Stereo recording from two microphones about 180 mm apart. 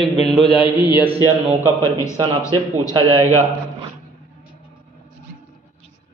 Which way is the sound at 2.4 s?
15° left (ahead or behind).